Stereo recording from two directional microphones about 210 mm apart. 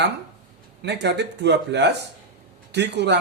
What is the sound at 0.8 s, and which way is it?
Speech, 55° right (ahead or behind).